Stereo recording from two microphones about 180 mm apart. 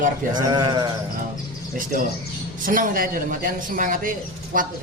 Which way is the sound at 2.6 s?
50° right (ahead or behind).